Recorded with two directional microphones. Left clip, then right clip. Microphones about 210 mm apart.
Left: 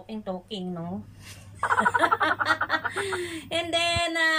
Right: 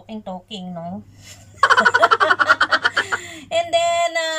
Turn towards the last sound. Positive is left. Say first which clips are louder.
# right 4 dB
turn(degrees=-5)  # may be behind; listen again after turning